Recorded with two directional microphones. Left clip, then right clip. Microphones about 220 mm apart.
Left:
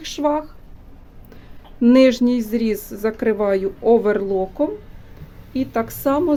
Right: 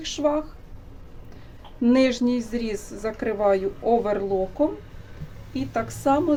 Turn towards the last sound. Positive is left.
turn(degrees=50)  # may be behind; listen again after turning